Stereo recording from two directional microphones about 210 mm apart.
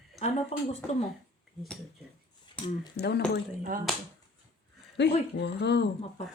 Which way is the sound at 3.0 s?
50° left (ahead or behind).